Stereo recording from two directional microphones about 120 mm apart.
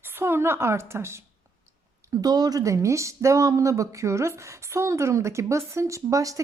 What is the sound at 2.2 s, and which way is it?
Speech, 30° right (ahead or behind).